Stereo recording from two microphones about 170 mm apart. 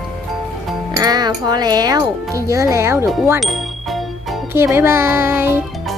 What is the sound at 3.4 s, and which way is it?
Ding, centre (ahead or behind).